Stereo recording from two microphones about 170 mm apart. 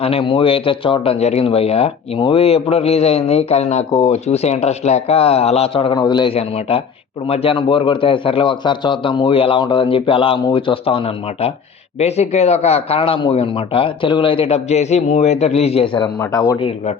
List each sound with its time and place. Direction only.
0.0 s a man's voice: 35° left (ahead or behind)
16.2 s speech: 20° left (ahead or behind)